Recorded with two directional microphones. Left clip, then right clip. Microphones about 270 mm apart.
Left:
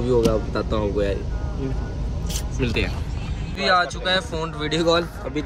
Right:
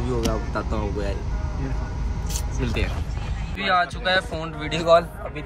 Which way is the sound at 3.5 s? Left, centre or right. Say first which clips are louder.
Left 2 dB; centre.